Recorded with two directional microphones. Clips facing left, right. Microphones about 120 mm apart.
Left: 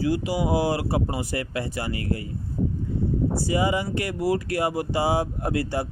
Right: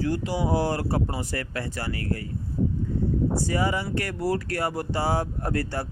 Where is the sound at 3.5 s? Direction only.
15° left (ahead or behind).